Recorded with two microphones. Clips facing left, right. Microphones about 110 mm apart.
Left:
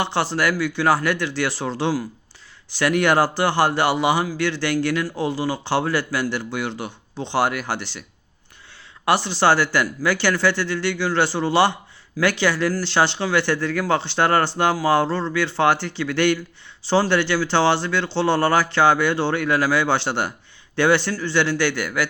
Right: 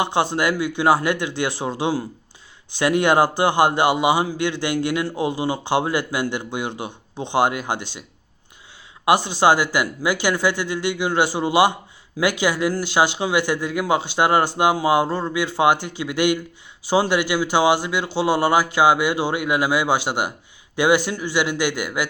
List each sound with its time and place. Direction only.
0.0 s a man's voice: 15° right (ahead or behind)
9.0 s speech: 15° right (ahead or behind)